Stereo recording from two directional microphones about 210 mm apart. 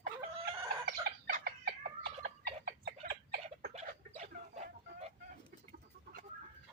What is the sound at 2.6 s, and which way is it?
Fowl, 50° right (ahead or behind).